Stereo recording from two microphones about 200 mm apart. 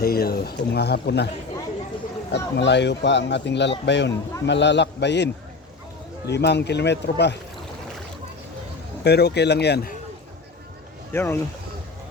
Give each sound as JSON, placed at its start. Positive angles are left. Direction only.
{"t": 0.0, "sound": "speech", "side_deg": 50}
{"t": 2.3, "sound": "speech", "side_deg": 60}
{"t": 9.0, "sound": "speech", "side_deg": 55}
{"t": 11.1, "sound": "speech", "side_deg": 10}